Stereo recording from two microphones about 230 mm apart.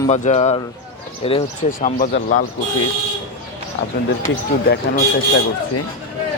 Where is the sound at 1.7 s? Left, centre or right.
Left.